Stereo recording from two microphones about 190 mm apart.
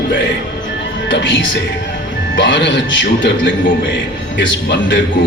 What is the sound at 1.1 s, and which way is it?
Speech, 75° left (ahead or behind).